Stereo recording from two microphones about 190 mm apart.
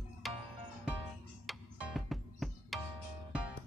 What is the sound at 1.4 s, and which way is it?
Music, centre (ahead or behind).